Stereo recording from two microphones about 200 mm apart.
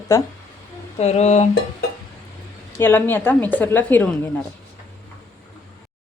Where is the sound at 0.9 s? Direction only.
35° left (ahead or behind).